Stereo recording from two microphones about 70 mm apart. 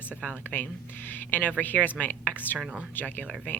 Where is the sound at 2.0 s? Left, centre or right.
Left.